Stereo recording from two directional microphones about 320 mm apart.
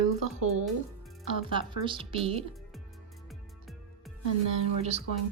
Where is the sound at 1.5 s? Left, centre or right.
Centre.